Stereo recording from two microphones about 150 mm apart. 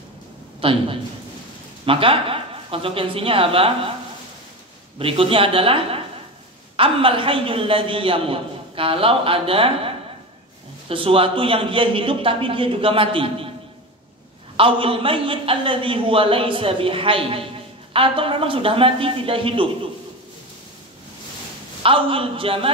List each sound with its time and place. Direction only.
0.6 s a man's voice: 35° right (ahead or behind)
4.9 s a man's voice: 40° right (ahead or behind)
14.6 s a man's voice: 35° right (ahead or behind)
21.8 s a man's voice: 35° right (ahead or behind)